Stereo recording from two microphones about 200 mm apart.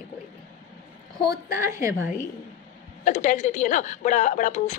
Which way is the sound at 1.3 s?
15° right (ahead or behind).